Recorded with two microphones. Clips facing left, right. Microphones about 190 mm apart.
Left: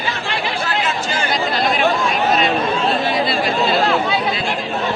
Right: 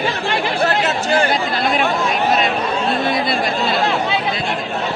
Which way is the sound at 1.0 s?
55° right (ahead or behind).